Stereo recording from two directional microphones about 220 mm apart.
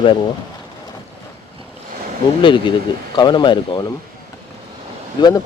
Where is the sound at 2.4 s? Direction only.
20° left (ahead or behind).